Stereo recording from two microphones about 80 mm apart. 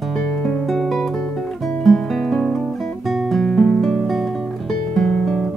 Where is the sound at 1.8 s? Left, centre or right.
Centre.